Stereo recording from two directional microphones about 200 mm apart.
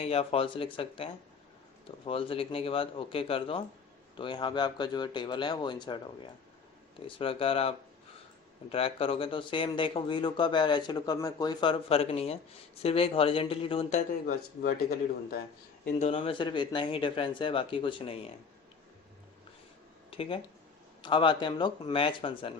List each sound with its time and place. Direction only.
0.0 s speech: 30° left (ahead or behind)
7.2 s speech: 25° left (ahead or behind); by 15.4 s 50° left (ahead or behind)
15.8 s speech: 35° left (ahead or behind)
20.1 s speech: 30° left (ahead or behind)